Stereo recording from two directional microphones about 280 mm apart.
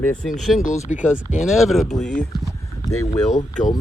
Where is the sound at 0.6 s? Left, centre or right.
Left.